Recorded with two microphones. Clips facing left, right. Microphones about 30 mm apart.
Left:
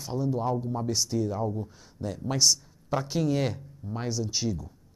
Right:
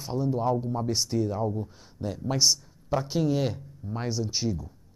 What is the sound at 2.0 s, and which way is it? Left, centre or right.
Speech, right.